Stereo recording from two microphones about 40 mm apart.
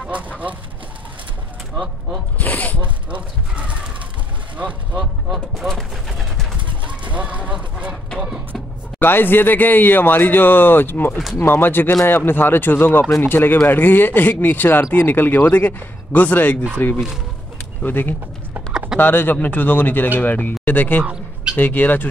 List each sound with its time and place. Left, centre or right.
2.3 s zipper: left
3.1 s horse: right
4.6 s speech: right
5.8 s gunshot: centre
7.1 s a sound: right
9.0 s a man's voice: left
16.8 s a man's voice: left
17.8 s a man's voice: left
21.0 s a sound: right
21.5 s a man's voice: left